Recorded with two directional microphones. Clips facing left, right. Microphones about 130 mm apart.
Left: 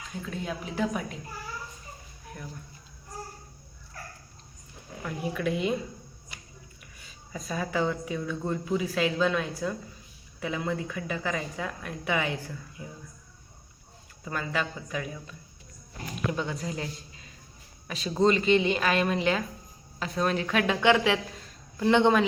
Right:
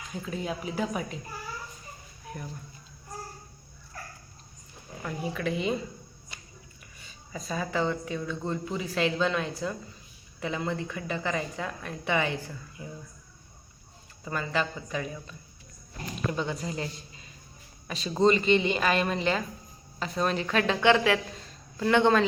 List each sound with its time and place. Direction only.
0.1 s speech: centre (ahead or behind)
2.3 s a sound: centre (ahead or behind)
5.0 s speech: centre (ahead or behind)
7.0 s speech: centre (ahead or behind)
14.3 s a man's voice: centre (ahead or behind)
21.3 s a sound: centre (ahead or behind)
21.8 s speech: 20° left (ahead or behind)